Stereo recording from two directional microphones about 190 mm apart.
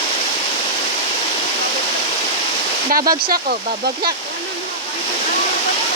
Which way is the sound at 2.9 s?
50° right (ahead or behind).